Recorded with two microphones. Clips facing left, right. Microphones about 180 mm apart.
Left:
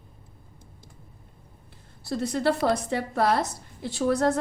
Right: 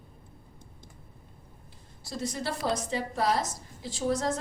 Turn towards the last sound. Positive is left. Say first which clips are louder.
# left 6 dB
turn(degrees=60)  # may be behind; listen again after turning